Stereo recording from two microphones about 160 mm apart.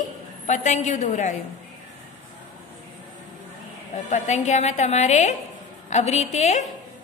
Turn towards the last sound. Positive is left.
turn(degrees=45)  # may be behind; listen again after turning